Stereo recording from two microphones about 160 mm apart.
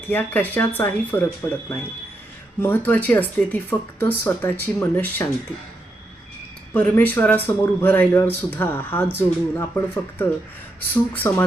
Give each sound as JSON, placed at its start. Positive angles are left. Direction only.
{"t": 0.1, "sound": "speech", "side_deg": 10}
{"t": 6.7, "sound": "speech", "side_deg": 10}